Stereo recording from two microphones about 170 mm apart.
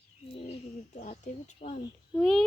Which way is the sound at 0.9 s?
45° left (ahead or behind).